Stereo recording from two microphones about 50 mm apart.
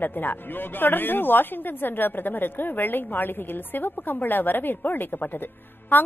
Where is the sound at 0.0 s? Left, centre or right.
Left.